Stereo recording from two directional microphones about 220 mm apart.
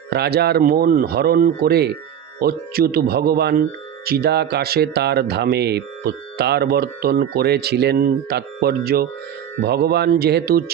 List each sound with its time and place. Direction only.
0.1 s speech: 45° right (ahead or behind)